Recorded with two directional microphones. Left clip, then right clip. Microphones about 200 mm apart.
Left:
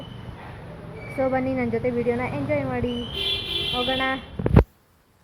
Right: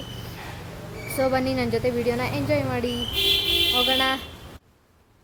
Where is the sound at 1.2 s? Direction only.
20° right (ahead or behind).